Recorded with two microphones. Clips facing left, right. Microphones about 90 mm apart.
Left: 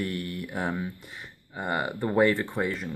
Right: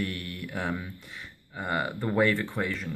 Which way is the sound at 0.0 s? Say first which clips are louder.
Left 2 dB; 20° left (ahead or behind).